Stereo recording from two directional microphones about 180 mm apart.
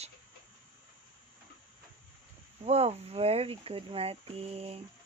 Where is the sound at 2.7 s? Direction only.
35° right (ahead or behind).